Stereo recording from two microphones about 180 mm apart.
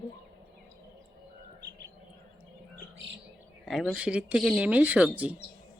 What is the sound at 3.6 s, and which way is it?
Speech, centre (ahead or behind).